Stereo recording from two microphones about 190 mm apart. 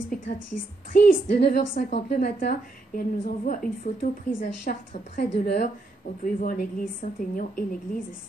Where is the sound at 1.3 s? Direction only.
60° left (ahead or behind).